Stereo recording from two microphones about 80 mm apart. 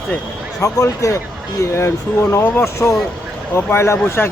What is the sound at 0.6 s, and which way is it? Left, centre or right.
Speech, left.